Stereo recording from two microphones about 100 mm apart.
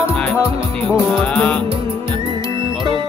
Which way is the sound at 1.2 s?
10° left (ahead or behind).